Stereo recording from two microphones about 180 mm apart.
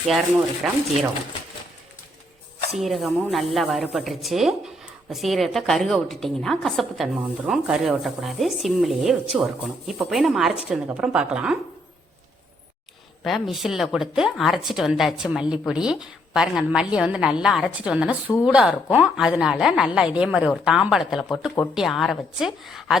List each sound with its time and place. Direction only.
0.6 s a woman's voice: 5° right (ahead or behind)
2.7 s a woman's voice: centre (ahead or behind)
13.2 s a woman's voice: centre (ahead or behind)